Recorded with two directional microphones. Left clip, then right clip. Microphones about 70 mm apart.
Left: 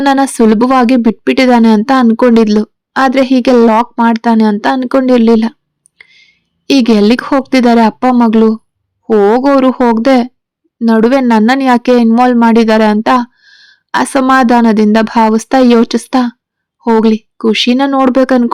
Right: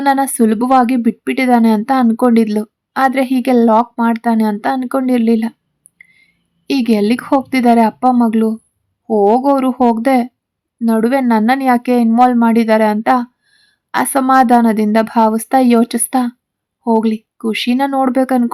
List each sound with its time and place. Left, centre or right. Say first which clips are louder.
0.0 s speech: left 4 dB; left
6.0 s a sound: left 5 dB; left
7.4 s speech: left 4 dB; left